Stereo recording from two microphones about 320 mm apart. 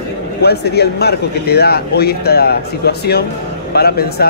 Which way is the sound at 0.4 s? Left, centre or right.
Left.